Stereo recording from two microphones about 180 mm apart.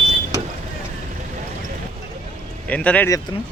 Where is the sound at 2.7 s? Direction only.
10° left (ahead or behind).